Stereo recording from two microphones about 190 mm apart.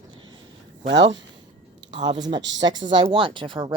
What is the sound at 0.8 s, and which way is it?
Speech, 70° right (ahead or behind).